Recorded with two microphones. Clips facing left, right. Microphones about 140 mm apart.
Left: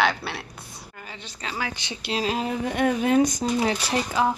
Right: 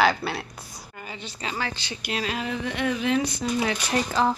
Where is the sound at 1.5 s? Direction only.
10° left (ahead or behind).